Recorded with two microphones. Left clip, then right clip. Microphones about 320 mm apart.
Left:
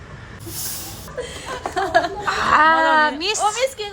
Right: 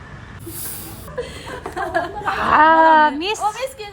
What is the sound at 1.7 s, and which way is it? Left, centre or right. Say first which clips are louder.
Chuckle: left 4 dB; left.